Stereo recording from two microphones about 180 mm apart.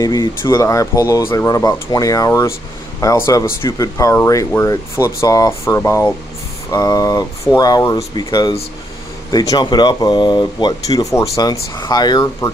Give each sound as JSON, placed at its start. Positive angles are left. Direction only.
{"t": 0.0, "sound": "speech", "side_deg": 20}